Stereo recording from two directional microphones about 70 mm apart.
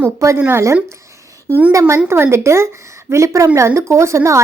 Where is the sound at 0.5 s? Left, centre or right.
Right.